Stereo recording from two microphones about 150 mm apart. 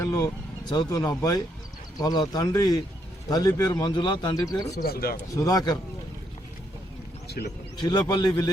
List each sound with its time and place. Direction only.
0.0 s a sound: 20° left (ahead or behind)
0.7 s a man's voice: 25° left (ahead or behind)
4.8 s speech: 85° left
5.3 s a man's voice: 25° left (ahead or behind)
7.3 s speech: 90° left
7.8 s a man's voice: 30° left (ahead or behind)